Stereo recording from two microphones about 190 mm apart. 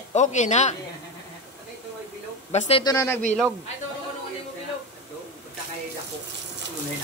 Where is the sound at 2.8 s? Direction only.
15° left (ahead or behind).